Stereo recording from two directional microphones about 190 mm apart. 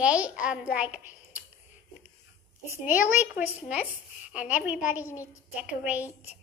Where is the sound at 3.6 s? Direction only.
5° right (ahead or behind).